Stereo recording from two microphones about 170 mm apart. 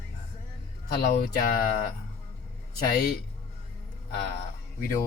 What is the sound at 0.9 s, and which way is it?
Speech, 60° left (ahead or behind).